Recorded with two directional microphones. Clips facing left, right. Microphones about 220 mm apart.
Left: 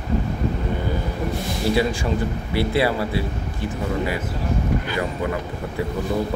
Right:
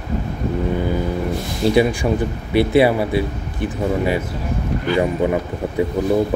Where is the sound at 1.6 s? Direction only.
20° right (ahead or behind).